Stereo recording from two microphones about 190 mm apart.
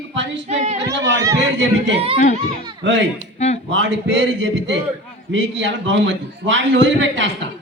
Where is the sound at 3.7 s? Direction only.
70° right (ahead or behind).